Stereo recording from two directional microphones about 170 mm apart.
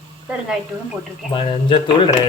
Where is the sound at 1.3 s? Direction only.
30° left (ahead or behind).